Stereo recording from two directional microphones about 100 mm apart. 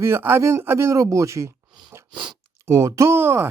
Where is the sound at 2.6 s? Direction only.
30° right (ahead or behind).